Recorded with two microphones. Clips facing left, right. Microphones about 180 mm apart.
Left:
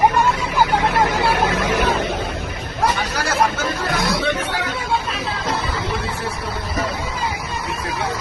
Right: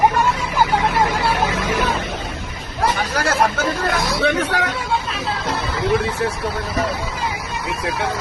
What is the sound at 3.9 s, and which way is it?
Music, 65° left (ahead or behind).